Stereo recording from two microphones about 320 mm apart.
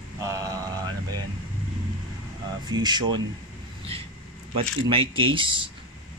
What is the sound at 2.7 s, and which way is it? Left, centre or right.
Speech, centre.